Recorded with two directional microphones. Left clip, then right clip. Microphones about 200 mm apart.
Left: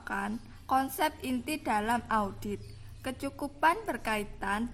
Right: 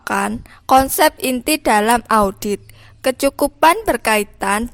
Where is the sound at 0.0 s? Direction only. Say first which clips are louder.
Right 16 dB; 55° right (ahead or behind).